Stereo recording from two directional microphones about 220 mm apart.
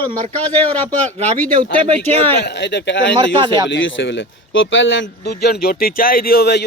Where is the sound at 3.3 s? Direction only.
20° right (ahead or behind).